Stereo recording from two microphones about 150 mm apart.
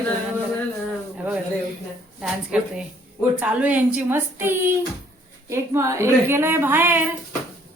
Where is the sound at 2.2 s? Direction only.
5° right (ahead or behind).